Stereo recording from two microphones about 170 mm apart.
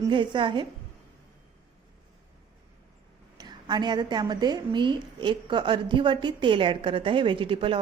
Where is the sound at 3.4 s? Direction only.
25° right (ahead or behind).